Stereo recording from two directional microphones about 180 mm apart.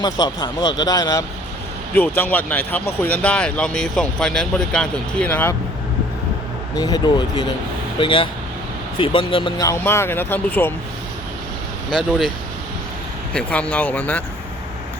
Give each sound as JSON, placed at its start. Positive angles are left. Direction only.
{"t": 0.0, "sound": "speech", "side_deg": 25}
{"t": 2.0, "sound": "speech", "side_deg": 10}
{"t": 6.7, "sound": "speech", "side_deg": 20}
{"t": 13.3, "sound": "speech", "side_deg": 5}